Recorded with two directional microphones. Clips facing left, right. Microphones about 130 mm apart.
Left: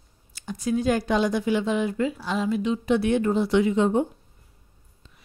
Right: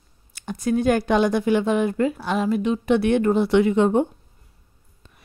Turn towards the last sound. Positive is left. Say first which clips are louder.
# right 3 dB
turn(degrees=-60)  # may be behind; listen again after turning